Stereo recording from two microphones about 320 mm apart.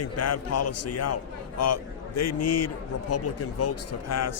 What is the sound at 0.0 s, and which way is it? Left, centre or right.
A man's voice, left.